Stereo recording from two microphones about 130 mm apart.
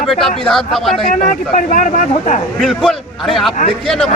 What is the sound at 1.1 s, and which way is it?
Speech, 85° left.